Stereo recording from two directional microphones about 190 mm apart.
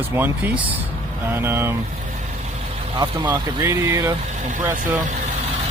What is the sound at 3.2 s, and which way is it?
Speech, 15° right (ahead or behind).